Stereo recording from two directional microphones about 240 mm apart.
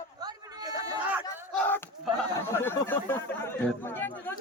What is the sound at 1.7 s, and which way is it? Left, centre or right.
Battle cry, centre.